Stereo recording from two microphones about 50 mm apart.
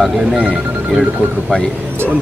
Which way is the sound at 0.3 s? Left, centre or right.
Centre.